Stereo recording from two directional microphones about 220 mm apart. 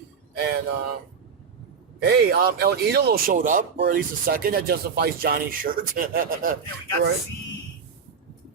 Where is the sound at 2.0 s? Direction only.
45° right (ahead or behind).